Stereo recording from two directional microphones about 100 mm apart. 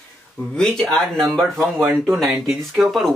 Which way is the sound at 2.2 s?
5° right (ahead or behind).